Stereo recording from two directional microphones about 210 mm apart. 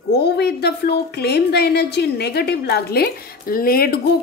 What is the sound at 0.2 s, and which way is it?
A woman's voice, 50° left (ahead or behind).